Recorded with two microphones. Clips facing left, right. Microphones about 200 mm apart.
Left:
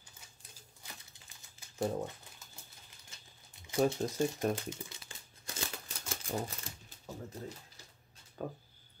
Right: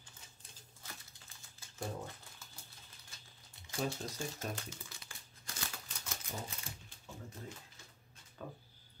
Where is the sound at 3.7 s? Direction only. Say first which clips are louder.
Left 9 dB; 50° left (ahead or behind).